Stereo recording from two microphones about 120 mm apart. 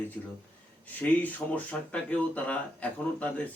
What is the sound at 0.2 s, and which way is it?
Speech, 10° left (ahead or behind).